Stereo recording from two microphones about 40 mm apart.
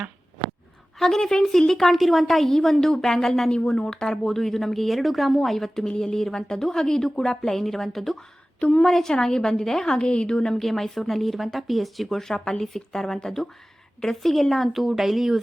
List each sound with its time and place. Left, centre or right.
0.9 s speech: centre
3.5 s a woman's voice: left
4.0 s speech: centre
10.0 s a woman's voice: left
10.6 s speech: centre
12.2 s speech: centre